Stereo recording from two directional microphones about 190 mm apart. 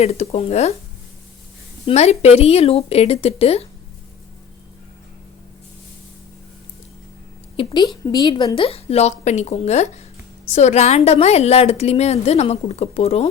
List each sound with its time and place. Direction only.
0.0 s a woman's voice: 35° left (ahead or behind)
1.9 s a woman's voice: 35° left (ahead or behind)
7.5 s a woman's voice: 25° left (ahead or behind)